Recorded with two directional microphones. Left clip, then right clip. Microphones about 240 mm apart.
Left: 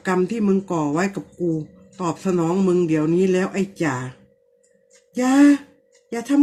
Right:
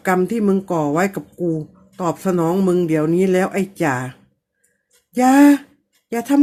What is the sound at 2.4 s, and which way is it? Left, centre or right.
Speech, right.